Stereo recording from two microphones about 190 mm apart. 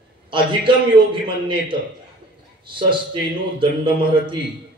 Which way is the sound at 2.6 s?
25° right (ahead or behind).